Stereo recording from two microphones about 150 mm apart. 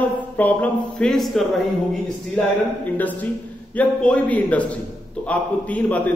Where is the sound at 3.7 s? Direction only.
10° left (ahead or behind).